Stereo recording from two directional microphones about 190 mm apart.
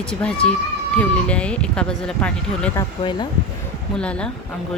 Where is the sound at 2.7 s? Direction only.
20° left (ahead or behind).